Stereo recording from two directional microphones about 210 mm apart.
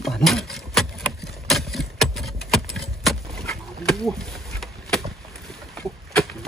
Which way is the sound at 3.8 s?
Centre (ahead or behind).